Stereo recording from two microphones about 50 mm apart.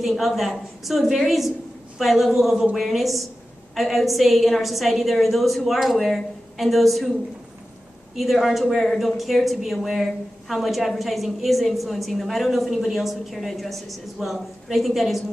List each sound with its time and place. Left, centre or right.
0.0 s a woman's voice: centre
8.2 s a woman's voice: centre